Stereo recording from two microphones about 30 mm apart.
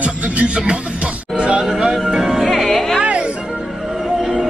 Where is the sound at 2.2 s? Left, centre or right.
Centre.